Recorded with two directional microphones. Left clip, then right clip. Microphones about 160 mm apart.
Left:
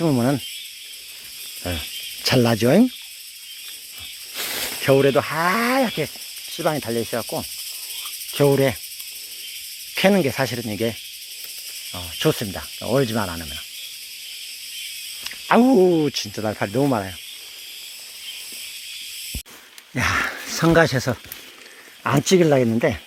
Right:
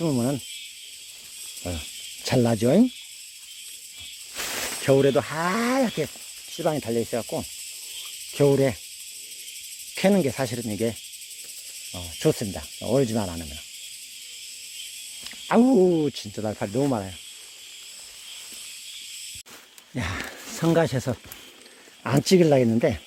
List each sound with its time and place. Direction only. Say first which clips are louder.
0.0 s speech: left 5 dB; 25° left (ahead or behind)
1.6 s insect: left 6 dB; 15° left (ahead or behind)
2.2 s speech: left 4 dB; centre (ahead or behind)
4.4 s speech: left 3 dB; 15° right (ahead or behind)
9.9 s speech: left 4 dB; centre (ahead or behind)
12.5 s speech: left 2 dB; centre (ahead or behind)
15.2 s speech: left 4 dB; centre (ahead or behind)
19.9 s speech: left 11 dB; 5° left (ahead or behind)
22.0 s speech: left 3 dB; 20° right (ahead or behind)